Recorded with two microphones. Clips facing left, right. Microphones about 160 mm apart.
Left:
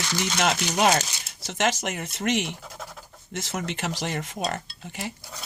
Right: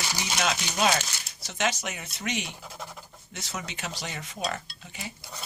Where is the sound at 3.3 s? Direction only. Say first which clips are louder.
Left 7 dB; 60° left (ahead or behind).